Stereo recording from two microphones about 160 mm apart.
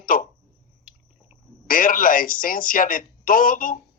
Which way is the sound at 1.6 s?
60° left (ahead or behind).